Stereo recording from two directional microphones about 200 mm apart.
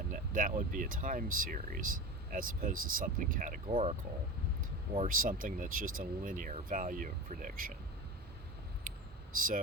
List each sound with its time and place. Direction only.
0.1 s speech: 40° right (ahead or behind)
3.7 s speech: 30° right (ahead or behind)
4.9 s speech: 45° right (ahead or behind)